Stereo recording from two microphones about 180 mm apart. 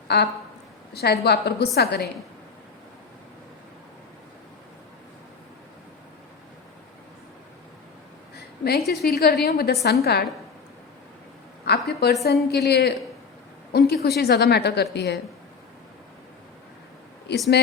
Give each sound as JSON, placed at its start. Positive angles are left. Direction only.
{"t": 0.1, "sound": "a woman's voice", "side_deg": 65}
{"t": 8.6, "sound": "a woman's voice", "side_deg": 60}
{"t": 11.9, "sound": "a woman's voice", "side_deg": 65}
{"t": 17.3, "sound": "a woman's voice", "side_deg": 65}